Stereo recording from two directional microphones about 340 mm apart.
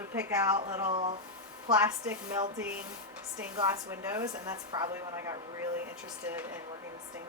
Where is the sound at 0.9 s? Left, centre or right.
Centre.